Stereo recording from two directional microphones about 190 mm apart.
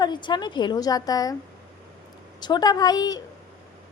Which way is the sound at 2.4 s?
20° left (ahead or behind).